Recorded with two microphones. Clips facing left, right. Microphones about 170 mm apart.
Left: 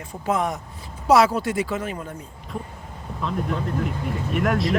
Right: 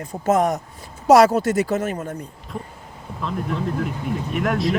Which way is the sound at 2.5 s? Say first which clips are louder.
Left 3 dB; centre (ahead or behind).